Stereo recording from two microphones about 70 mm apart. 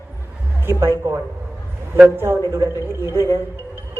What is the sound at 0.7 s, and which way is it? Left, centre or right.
Speech, right.